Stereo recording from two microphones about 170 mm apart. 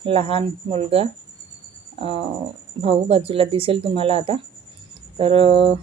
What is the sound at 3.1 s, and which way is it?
Speech, 35° right (ahead or behind).